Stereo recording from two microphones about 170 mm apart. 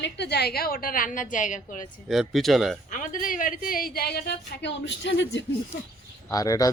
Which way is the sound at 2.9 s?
50° left (ahead or behind).